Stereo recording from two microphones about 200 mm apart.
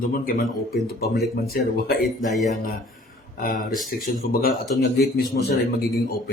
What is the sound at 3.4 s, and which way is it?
A man's voice, 45° left (ahead or behind).